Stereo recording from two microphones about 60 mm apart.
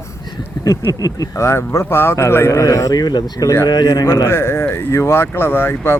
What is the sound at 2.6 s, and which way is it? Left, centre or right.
A man's voice, left.